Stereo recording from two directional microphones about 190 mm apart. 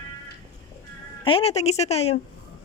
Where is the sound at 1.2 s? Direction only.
30° left (ahead or behind).